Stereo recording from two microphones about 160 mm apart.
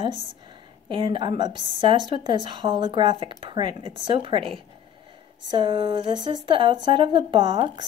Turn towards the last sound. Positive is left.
turn(degrees=-30)  # may be behind; listen again after turning